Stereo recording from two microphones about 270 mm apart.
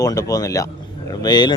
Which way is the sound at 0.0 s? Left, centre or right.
Centre.